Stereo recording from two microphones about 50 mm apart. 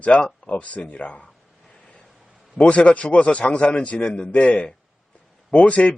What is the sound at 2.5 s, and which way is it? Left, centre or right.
Speech, left.